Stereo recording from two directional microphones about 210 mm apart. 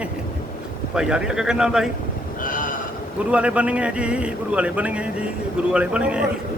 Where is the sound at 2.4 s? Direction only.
40° left (ahead or behind).